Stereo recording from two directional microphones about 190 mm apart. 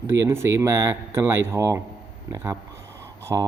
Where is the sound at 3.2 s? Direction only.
15° right (ahead or behind).